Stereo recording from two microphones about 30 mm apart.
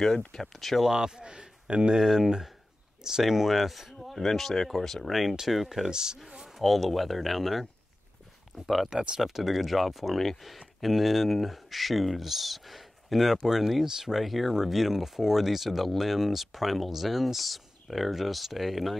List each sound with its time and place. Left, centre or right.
0.4 s speech: centre
0.8 s speech: right
2.0 s speech: centre
3.3 s speech: centre
4.0 s speech: centre
5.5 s speech: centre
5.9 s speech: right
6.5 s speech: centre
8.6 s speech: centre
14.2 s speech: centre